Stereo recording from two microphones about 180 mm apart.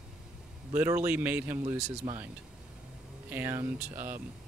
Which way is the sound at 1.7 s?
35° right (ahead or behind).